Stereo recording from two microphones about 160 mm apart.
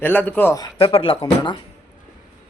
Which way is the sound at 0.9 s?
35° left (ahead or behind).